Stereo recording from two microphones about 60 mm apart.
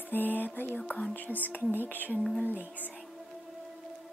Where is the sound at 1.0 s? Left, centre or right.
Left.